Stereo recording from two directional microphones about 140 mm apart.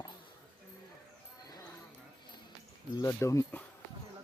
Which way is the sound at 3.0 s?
20° left (ahead or behind).